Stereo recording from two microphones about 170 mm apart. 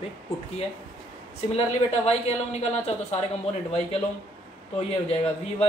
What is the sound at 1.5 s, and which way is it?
A woman's voice, 40° left (ahead or behind).